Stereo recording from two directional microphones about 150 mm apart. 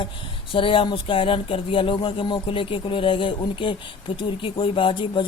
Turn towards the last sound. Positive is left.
turn(degrees=35)  # may be behind; listen again after turning